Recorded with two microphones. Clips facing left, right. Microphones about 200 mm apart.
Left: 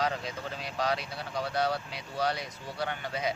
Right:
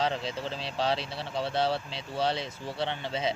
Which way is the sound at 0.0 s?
30° right (ahead or behind).